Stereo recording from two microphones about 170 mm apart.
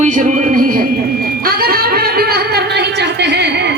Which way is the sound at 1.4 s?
60° right (ahead or behind).